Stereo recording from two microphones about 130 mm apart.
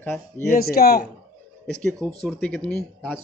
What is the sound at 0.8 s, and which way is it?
Speech, 90° left.